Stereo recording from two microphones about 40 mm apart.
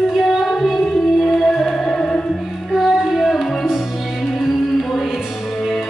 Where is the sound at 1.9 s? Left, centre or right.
Left.